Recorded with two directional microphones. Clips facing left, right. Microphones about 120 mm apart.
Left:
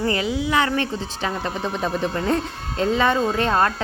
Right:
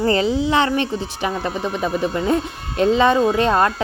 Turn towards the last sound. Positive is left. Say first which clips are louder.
# right 3 dB
turn(degrees=-15)  # may be behind; listen again after turning